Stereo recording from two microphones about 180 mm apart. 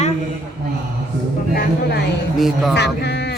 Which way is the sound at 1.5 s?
65° left (ahead or behind).